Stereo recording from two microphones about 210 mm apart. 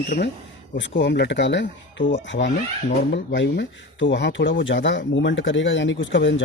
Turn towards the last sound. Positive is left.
turn(degrees=60)  # may be behind; listen again after turning